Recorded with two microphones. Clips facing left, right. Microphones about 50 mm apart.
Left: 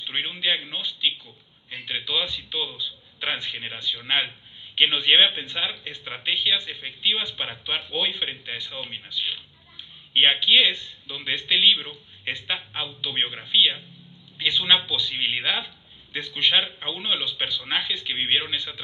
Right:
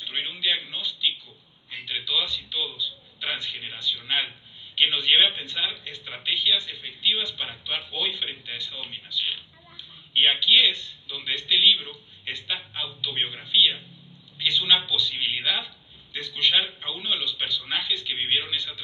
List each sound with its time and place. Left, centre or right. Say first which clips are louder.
0.1 s a man's voice: left 2 dB; left